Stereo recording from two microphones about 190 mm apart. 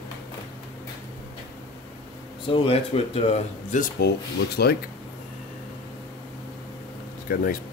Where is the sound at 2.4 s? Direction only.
30° left (ahead or behind); by 4.7 s 60° left (ahead or behind).